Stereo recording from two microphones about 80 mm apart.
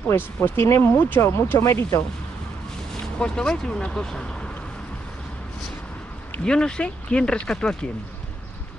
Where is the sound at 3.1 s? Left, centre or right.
Centre.